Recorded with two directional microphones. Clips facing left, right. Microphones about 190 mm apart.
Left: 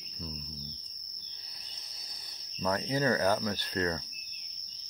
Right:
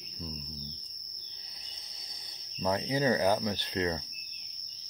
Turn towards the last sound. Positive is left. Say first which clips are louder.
# right 1 dB
turn(degrees=-15)  # may be behind; listen again after turning